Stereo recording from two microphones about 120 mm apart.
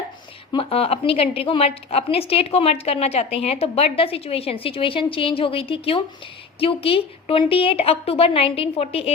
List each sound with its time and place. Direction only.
0.5 s a woman's voice: 50° left (ahead or behind)